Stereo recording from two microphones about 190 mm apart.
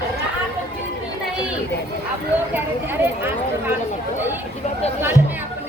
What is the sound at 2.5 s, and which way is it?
Speech, 10° right (ahead or behind).